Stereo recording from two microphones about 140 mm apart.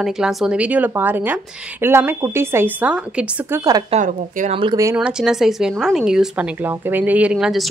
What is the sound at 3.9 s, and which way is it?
Speech, 65° right (ahead or behind).